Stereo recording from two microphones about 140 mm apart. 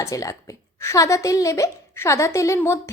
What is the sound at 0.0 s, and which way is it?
Speech, 25° left (ahead or behind).